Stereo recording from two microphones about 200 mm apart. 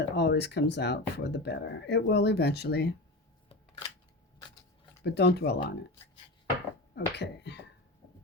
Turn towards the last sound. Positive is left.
turn(degrees=60)  # may be behind; listen again after turning